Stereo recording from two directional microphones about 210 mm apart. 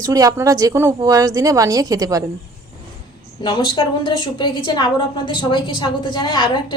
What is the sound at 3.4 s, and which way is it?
A woman's voice, 25° left (ahead or behind).